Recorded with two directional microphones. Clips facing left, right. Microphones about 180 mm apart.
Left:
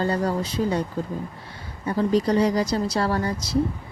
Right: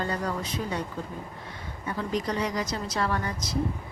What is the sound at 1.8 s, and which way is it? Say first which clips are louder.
Speech: left 9 dB; 35° left (ahead or behind).